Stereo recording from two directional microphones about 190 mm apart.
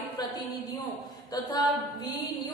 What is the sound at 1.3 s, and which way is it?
Speech, 20° left (ahead or behind).